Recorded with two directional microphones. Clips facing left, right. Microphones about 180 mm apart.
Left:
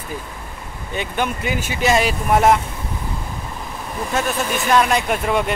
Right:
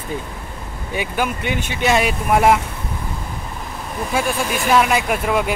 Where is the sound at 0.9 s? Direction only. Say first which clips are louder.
Right 1 dB; 5° right (ahead or behind).